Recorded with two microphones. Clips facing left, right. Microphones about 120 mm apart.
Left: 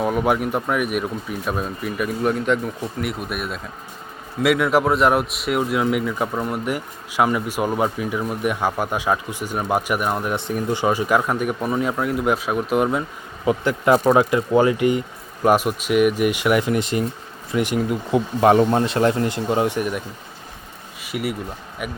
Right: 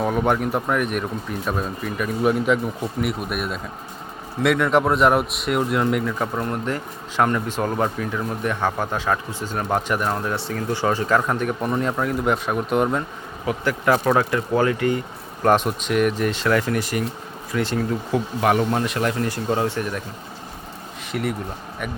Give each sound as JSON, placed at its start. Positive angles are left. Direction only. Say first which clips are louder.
{"t": 0.0, "sound": "speech", "louder": "left 1 dB", "side_deg": 5}
{"t": 13.4, "sound": "speech", "louder": "left 3 dB", "side_deg": 20}
{"t": 15.4, "sound": "speech", "louder": "left 1 dB", "side_deg": 5}
{"t": 18.3, "sound": "speech", "louder": "left 5 dB", "side_deg": 30}
{"t": 21.0, "sound": "speech", "louder": "even", "side_deg": 5}